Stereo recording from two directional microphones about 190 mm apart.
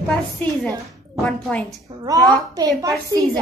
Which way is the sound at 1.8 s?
20° right (ahead or behind).